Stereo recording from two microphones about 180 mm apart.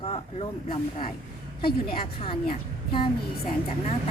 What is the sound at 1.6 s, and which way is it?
Speech, 55° left (ahead or behind).